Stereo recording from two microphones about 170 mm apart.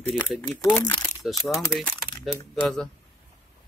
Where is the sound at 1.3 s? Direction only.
Centre (ahead or behind).